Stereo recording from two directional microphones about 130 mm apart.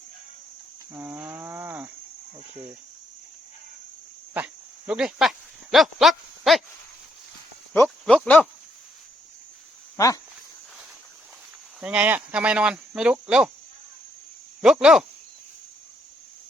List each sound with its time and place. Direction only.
0.9 s livestock: 20° right (ahead or behind)
4.4 s cricket: 5° right (ahead or behind)
5.7 s a sound: centre (ahead or behind)
8.0 s speech: 5° left (ahead or behind)
11.8 s speech: 10° right (ahead or behind)
14.6 s speech: 5° right (ahead or behind)